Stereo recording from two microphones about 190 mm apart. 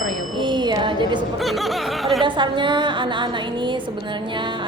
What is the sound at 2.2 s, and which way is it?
A woman's voice, 25° right (ahead or behind).